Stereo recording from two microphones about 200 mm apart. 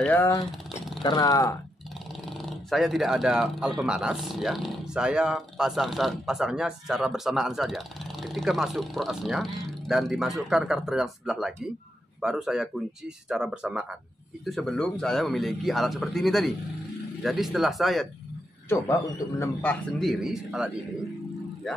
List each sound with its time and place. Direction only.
0.0 s speech: 10° left (ahead or behind)
2.2 s speech: centre (ahead or behind)
18.7 s speech: 15° left (ahead or behind); by 20.7 s centre (ahead or behind)